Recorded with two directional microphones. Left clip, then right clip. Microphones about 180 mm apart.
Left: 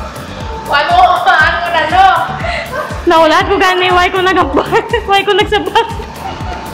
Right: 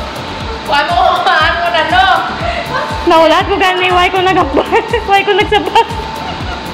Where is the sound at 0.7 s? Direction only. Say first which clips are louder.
Even; 10° left (ahead or behind).